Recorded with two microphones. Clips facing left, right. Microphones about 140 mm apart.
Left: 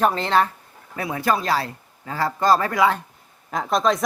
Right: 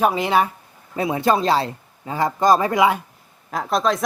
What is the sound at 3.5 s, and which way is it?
Speech, centre (ahead or behind).